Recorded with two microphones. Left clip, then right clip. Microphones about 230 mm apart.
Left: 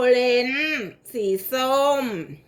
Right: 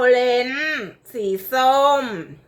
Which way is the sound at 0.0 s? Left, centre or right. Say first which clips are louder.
Right 2 dB; centre.